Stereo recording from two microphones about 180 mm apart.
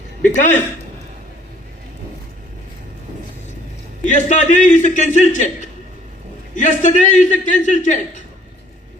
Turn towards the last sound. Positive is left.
turn(degrees=45)  # may be behind; listen again after turning